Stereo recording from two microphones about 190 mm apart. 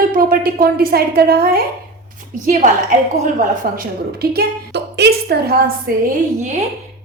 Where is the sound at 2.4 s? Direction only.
40° right (ahead or behind).